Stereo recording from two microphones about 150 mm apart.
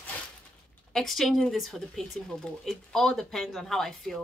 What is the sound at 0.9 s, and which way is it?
Speech, centre (ahead or behind).